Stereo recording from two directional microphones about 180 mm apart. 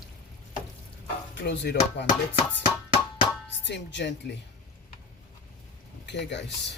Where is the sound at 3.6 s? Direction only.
75° left (ahead or behind).